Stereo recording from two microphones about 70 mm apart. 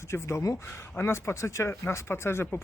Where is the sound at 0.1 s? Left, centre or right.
Left.